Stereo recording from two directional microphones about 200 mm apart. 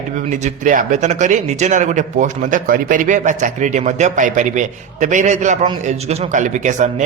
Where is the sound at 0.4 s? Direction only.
40° right (ahead or behind).